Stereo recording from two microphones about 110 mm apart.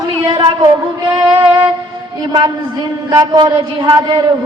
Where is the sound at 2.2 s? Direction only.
45° right (ahead or behind).